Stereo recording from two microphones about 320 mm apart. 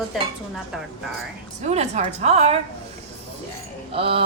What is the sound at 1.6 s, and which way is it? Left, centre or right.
Speech, right.